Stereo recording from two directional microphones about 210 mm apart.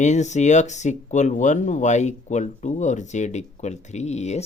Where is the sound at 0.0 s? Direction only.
35° left (ahead or behind).